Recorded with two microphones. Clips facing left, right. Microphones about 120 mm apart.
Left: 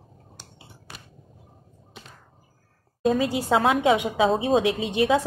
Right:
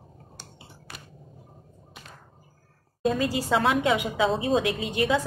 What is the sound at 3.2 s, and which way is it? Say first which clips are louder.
A woman's voice: even; 25° left (ahead or behind).